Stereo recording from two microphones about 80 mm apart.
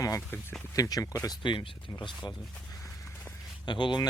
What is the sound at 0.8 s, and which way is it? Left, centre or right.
Speech, left.